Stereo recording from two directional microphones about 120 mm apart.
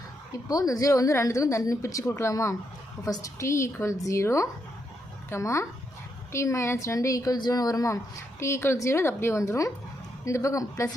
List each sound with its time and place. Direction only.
0.4 s a woman's voice: 30° left (ahead or behind)